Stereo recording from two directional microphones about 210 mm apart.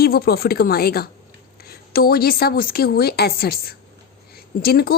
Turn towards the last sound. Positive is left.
turn(degrees=45)  # may be behind; listen again after turning